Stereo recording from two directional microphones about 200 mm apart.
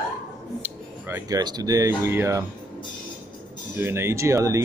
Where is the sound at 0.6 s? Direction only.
10° right (ahead or behind).